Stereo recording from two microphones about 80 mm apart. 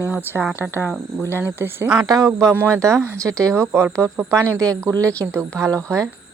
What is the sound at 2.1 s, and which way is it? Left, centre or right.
Speech, right.